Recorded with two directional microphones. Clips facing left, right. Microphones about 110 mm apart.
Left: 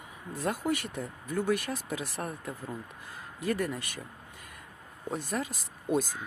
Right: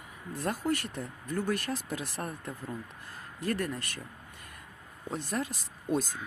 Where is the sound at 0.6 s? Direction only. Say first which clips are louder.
Even; 15° left (ahead or behind).